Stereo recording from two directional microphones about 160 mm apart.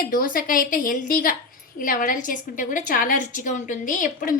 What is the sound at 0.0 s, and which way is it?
A woman's voice, 60° left (ahead or behind).